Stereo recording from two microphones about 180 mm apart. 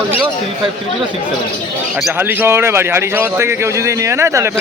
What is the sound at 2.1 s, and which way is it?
A man's voice, 10° right (ahead or behind).